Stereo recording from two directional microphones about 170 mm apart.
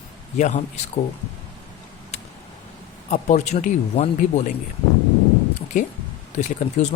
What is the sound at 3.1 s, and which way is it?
Speech, 40° left (ahead or behind).